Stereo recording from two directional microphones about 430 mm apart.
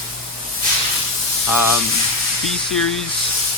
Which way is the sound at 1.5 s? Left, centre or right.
Left.